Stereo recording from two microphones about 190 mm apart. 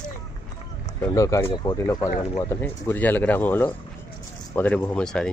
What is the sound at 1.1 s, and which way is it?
Speech, 15° left (ahead or behind).